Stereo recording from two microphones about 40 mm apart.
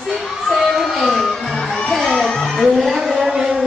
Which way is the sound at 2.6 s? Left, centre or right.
Centre.